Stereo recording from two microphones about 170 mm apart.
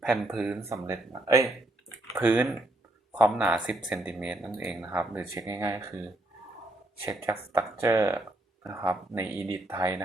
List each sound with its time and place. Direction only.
0.0 s speech: centre (ahead or behind)
0.6 s speech: 15° right (ahead or behind)
5.3 s speech: 20° right (ahead or behind)
7.0 s speech: 15° right (ahead or behind)